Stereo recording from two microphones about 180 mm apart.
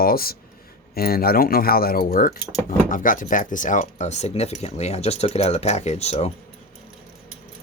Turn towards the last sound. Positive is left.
turn(degrees=35)  # may be behind; listen again after turning